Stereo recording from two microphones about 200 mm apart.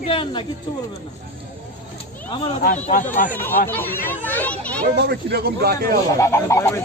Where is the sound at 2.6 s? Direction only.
40° left (ahead or behind).